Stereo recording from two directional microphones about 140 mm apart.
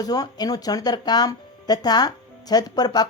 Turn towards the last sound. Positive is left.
turn(degrees=30)  # may be behind; listen again after turning